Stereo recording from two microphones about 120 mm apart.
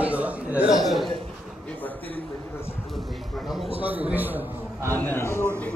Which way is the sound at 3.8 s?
15° right (ahead or behind).